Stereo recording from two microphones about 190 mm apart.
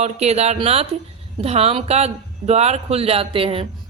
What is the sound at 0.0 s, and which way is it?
Speech, 35° right (ahead or behind).